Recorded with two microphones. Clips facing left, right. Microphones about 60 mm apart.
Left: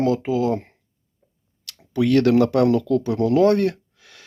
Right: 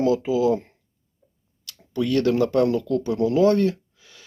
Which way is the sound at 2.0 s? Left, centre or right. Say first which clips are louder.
Left 4 dB; left.